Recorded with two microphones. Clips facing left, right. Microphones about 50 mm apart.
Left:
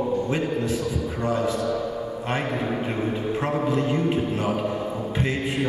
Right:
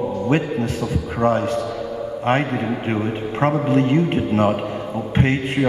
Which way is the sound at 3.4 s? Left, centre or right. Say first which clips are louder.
Right 8 dB; right.